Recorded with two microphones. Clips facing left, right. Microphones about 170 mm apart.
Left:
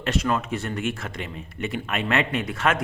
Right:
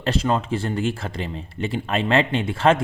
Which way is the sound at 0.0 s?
30° right (ahead or behind).